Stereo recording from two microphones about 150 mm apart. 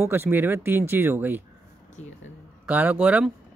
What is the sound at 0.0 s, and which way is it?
Speech, 15° right (ahead or behind).